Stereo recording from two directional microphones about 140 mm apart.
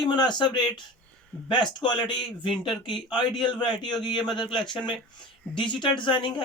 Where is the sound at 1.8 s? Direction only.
35° left (ahead or behind).